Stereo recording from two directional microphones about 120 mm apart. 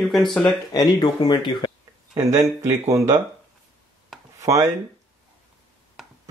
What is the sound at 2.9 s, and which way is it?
Speech, 30° right (ahead or behind).